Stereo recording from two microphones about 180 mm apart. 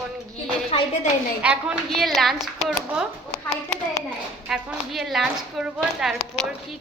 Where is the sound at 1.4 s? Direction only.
5° right (ahead or behind).